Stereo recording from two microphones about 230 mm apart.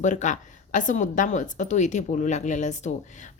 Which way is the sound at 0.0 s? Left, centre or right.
Left.